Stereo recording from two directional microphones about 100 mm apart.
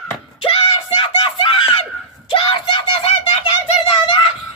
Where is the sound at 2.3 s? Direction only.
55° left (ahead or behind).